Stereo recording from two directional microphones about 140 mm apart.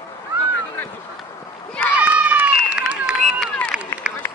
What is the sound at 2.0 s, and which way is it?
Run, 10° right (ahead or behind).